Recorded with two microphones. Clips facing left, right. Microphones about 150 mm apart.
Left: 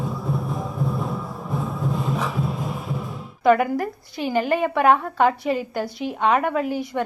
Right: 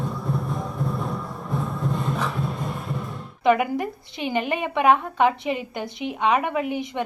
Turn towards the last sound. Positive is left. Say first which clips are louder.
# left 2 dB
turn(degrees=-20)  # may be behind; listen again after turning